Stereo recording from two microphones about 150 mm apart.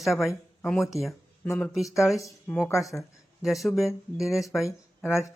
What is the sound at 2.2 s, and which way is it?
Speech, 20° left (ahead or behind).